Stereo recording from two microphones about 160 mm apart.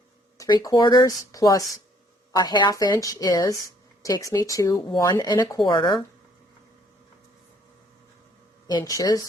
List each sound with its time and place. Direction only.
0.3 s speech: 25° left (ahead or behind)
8.6 s speech: 20° left (ahead or behind)